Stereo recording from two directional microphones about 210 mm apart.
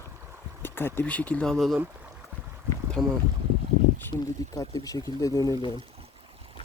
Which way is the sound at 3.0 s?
Centre (ahead or behind).